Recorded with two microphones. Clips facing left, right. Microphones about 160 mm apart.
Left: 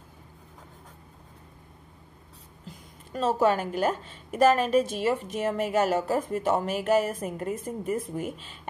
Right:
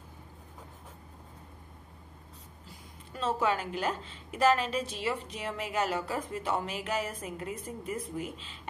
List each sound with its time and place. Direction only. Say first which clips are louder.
3.1 s a woman's voice: left 6 dB; 45° left (ahead or behind)